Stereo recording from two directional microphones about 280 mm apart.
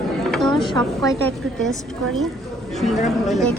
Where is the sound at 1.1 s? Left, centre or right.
Centre.